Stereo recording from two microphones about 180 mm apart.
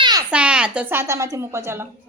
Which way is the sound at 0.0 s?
20° right (ahead or behind).